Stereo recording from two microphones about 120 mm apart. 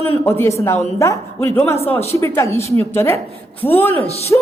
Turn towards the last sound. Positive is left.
turn(degrees=25)  # may be behind; listen again after turning